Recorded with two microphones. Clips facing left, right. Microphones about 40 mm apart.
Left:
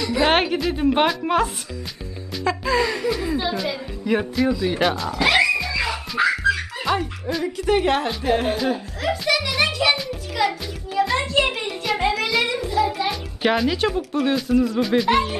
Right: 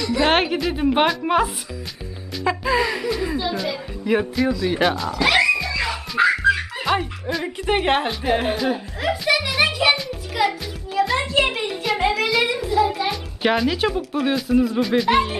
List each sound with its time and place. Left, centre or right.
0.0 s a woman's voice: centre
4.6 s music: centre
6.2 s music: centre
6.9 s a woman's voice: centre
7.4 s a woman's voice: right
8.1 s speech: centre
9.5 s music: centre
14.8 s a woman's voice: centre